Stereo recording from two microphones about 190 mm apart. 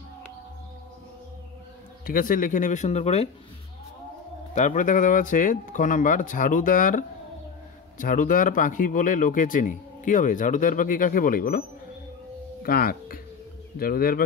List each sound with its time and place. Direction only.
2.0 s speech: 45° left (ahead or behind)
4.6 s speech: 40° left (ahead or behind)
12.6 s speech: 50° left (ahead or behind)